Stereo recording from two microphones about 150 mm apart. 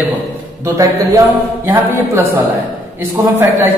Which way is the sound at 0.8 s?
20° right (ahead or behind).